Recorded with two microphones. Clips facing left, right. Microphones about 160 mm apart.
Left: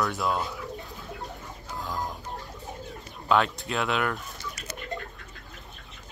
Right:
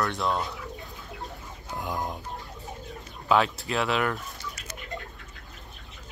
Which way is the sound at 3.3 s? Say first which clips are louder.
Right 1 dB; centre (ahead or behind).